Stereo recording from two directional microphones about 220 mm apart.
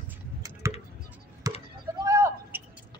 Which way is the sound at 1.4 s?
15° right (ahead or behind).